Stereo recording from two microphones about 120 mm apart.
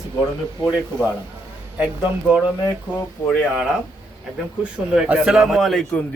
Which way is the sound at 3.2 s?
20° left (ahead or behind).